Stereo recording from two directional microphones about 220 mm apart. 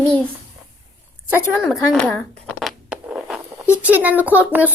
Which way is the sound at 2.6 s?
Centre (ahead or behind).